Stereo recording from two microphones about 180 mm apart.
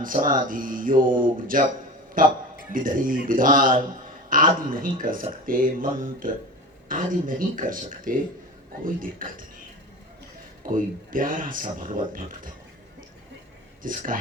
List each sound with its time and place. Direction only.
0.0 s a woman's voice: 50° right (ahead or behind)
10.6 s speech: 50° right (ahead or behind)
13.8 s speech: 50° right (ahead or behind)